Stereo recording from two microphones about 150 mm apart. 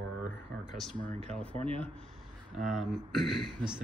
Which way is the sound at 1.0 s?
5° left (ahead or behind).